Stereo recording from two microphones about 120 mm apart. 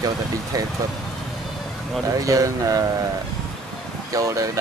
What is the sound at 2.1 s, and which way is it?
Speech, 30° right (ahead or behind).